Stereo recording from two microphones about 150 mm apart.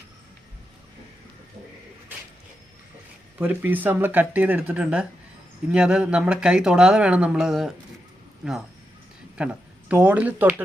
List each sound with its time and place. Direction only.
3.3 s speech: 10° right (ahead or behind)